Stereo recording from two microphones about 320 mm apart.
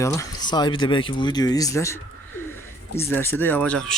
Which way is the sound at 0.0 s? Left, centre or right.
Centre.